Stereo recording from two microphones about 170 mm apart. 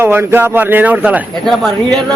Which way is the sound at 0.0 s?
15° right (ahead or behind).